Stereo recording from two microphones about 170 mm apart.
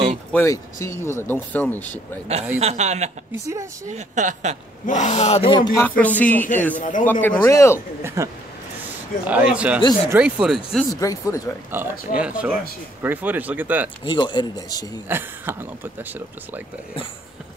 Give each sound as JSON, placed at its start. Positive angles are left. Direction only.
{"t": 0.3, "sound": "speech", "side_deg": 15}
{"t": 2.6, "sound": "speech", "side_deg": -40}
{"t": 4.8, "sound": "speech", "side_deg": 45}
{"t": 5.8, "sound": "speech", "side_deg": 10}
{"t": 6.8, "sound": "a man's voice", "side_deg": 50}
{"t": 7.1, "sound": "speech", "side_deg": 10}
{"t": 8.0, "sound": "speech", "side_deg": -15}
{"t": 9.8, "sound": "speech", "side_deg": 25}
{"t": 10.1, "sound": "speech", "side_deg": -5}
{"t": 10.9, "sound": "speech", "side_deg": 20}
{"t": 11.7, "sound": "speech", "side_deg": -10}
{"t": 14.0, "sound": "speech", "side_deg": 25}
{"t": 15.0, "sound": "speech", "side_deg": -10}